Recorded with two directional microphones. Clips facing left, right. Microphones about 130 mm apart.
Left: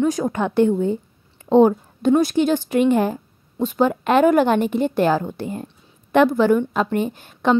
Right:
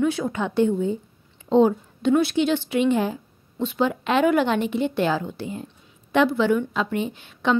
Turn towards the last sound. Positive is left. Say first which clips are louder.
# left 4 dB
turn(degrees=45)  # may be behind; listen again after turning